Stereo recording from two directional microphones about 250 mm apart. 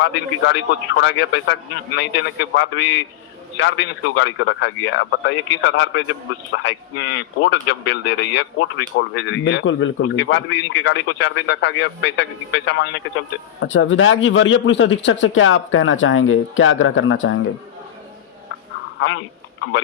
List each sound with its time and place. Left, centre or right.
0.0 s speech: left
18.9 s speech: left